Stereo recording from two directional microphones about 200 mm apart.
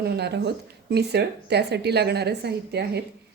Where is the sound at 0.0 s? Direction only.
55° right (ahead or behind).